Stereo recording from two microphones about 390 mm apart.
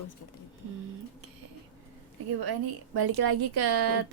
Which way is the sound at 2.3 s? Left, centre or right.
Right.